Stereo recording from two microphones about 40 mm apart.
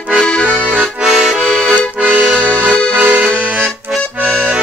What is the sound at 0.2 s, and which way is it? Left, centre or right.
Accordion, left.